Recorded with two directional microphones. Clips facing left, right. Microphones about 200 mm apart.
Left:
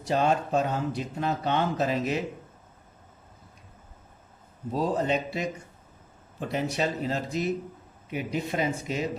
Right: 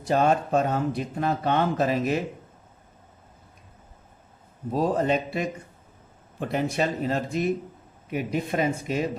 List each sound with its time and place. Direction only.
0.0 s speech: 55° right (ahead or behind)
4.7 s speech: 55° right (ahead or behind)
6.5 s speech: 55° right (ahead or behind)